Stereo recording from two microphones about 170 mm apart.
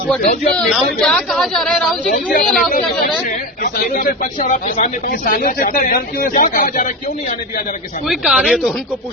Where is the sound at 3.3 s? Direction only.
50° left (ahead or behind).